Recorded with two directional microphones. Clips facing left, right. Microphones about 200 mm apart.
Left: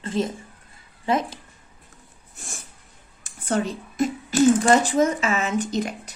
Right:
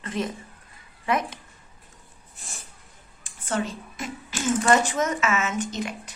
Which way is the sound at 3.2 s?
40° left (ahead or behind).